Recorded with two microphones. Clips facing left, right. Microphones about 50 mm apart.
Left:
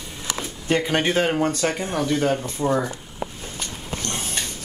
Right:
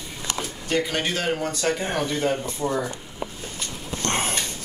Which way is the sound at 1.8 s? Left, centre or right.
Right.